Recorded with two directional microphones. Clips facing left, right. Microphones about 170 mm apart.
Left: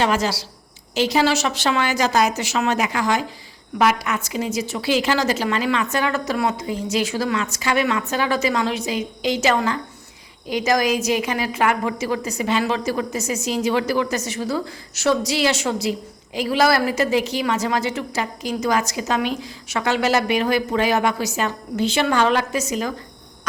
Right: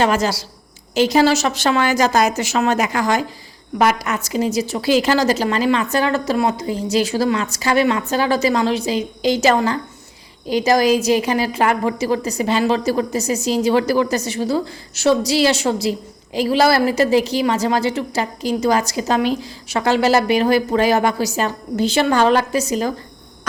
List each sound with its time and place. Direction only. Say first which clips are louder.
0.0 s a woman's voice: right 3 dB; 45° right (ahead or behind)